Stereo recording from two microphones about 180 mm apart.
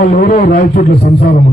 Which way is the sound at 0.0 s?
55° left (ahead or behind).